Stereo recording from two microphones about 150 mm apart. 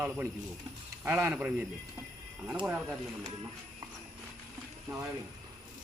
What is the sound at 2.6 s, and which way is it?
Speech, 10° right (ahead or behind).